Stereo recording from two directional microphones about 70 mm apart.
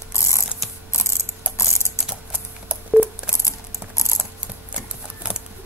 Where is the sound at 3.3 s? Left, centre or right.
Left.